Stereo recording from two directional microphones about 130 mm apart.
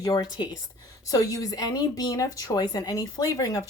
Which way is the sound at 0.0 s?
30° left (ahead or behind).